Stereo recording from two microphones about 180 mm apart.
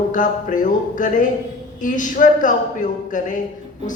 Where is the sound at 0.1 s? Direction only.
45° left (ahead or behind).